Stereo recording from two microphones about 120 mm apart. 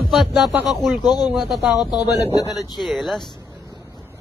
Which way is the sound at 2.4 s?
30° left (ahead or behind).